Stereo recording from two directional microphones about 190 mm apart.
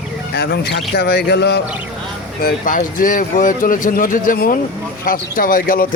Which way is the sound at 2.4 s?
45° left (ahead or behind).